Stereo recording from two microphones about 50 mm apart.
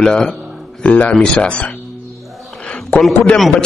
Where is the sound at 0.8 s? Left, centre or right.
Left.